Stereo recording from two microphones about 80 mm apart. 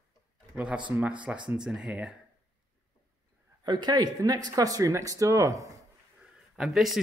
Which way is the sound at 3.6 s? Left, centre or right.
Right.